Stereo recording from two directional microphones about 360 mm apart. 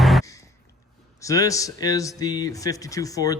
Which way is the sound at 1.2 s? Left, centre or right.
Centre.